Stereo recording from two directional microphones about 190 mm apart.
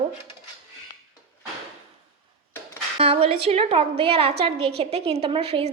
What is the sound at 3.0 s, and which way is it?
A woman's voice, 30° right (ahead or behind).